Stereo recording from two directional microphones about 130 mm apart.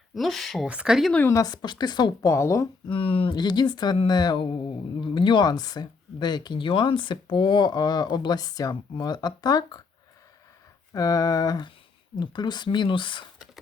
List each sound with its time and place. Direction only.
0.1 s speech: centre (ahead or behind)
1.3 s speech: 30° left (ahead or behind)
2.8 s speech: 40° left (ahead or behind)
10.9 s speech: 25° left (ahead or behind)